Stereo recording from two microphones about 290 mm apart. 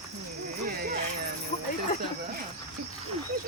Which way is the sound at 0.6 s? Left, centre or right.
Right.